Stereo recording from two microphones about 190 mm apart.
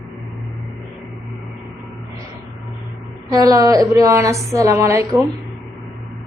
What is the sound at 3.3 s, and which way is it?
A woman's voice, 20° right (ahead or behind).